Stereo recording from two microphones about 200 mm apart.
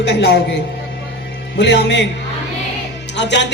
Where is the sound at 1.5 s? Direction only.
60° left (ahead or behind).